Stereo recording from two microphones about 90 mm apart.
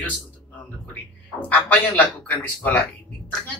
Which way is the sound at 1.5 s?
20° left (ahead or behind).